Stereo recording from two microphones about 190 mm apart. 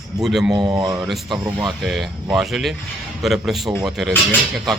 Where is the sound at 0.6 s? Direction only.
25° right (ahead or behind).